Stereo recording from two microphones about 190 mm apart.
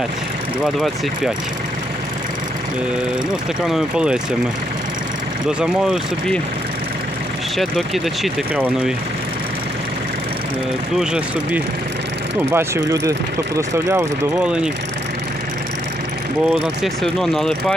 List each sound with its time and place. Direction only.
0.6 s speech: centre (ahead or behind)
3.7 s speech: 5° right (ahead or behind)
5.5 s speech: 5° right (ahead or behind)
7.5 s speech: centre (ahead or behind)
11.0 s speech: 5° right (ahead or behind)
16.5 s speech: centre (ahead or behind)